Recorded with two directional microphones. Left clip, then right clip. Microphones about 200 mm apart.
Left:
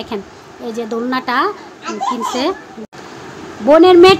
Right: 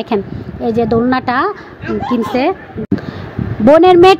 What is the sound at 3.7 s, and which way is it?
Speech, 30° right (ahead or behind).